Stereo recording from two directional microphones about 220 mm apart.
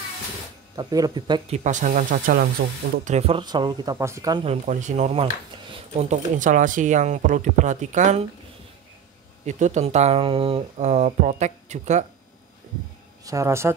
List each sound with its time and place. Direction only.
0.7 s speech: 15° right (ahead or behind)
1.6 s speech: 35° right (ahead or behind)
3.1 s speech: 25° right (ahead or behind)
9.5 s speech: 30° right (ahead or behind)
13.2 s speech: 15° right (ahead or behind)